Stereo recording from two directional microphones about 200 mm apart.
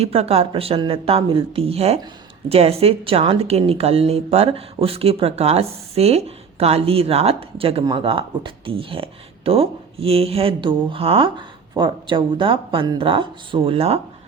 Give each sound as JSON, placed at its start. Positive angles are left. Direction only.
{"t": 0.0, "sound": "a woman's voice", "side_deg": -30}